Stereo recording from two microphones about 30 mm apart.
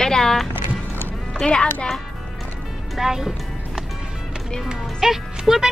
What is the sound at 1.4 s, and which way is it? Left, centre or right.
Speech, left.